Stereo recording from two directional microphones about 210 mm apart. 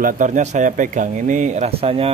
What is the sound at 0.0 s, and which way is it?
Speech, 40° right (ahead or behind).